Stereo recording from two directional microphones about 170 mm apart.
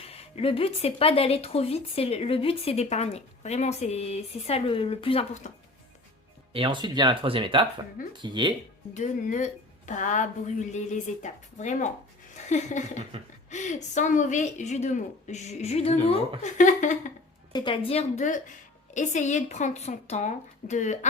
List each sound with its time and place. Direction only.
0.0 s speech: 35° left (ahead or behind)
6.5 s speech: 30° right (ahead or behind)
9.0 s a woman's voice: 45° left (ahead or behind)
16.4 s a woman's voice: 45° left (ahead or behind)
17.5 s a woman's voice: 30° left (ahead or behind); by 21.1 s 45° left (ahead or behind)